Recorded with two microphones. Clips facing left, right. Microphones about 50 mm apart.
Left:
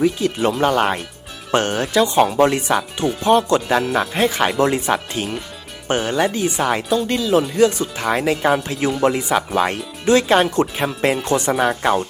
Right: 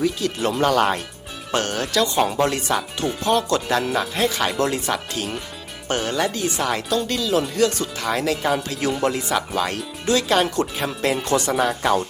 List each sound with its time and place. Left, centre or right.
0.0 s speech: left